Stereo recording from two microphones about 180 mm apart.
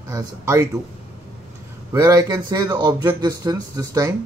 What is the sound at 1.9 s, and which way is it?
Speech, 20° right (ahead or behind).